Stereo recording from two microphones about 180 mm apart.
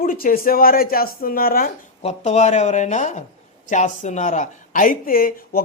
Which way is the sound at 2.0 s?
40° left (ahead or behind).